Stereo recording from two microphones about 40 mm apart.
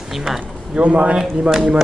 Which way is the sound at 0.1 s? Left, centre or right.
Centre.